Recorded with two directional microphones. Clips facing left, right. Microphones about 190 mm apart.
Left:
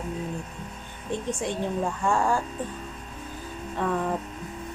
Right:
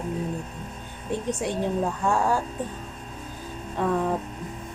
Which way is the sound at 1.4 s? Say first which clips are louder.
Right 2 dB; 5° right (ahead or behind).